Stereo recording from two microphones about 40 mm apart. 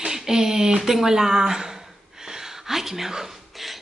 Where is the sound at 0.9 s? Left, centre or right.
Centre.